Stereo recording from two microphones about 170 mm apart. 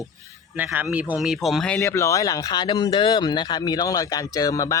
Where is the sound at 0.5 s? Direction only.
10° right (ahead or behind).